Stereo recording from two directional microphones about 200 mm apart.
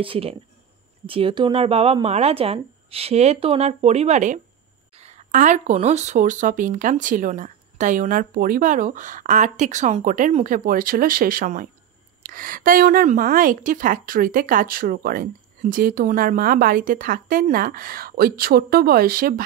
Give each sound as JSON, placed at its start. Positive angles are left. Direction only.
{"t": 0.0, "sound": "a woman's voice", "side_deg": -25}